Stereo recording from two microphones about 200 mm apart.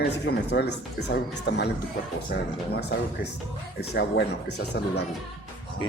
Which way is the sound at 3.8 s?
55° left (ahead or behind).